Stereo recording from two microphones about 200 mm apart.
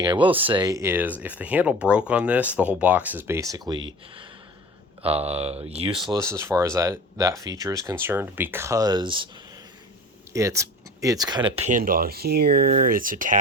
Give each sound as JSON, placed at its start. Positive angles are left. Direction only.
{"t": 0.0, "sound": "speech", "side_deg": -25}
{"t": 10.3, "sound": "speech", "side_deg": -15}